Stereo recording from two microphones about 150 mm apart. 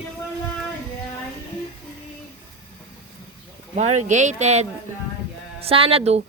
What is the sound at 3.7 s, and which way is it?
A woman's voice, 50° right (ahead or behind).